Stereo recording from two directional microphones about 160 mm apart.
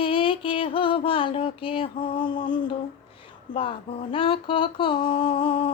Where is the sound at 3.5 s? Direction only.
35° left (ahead or behind).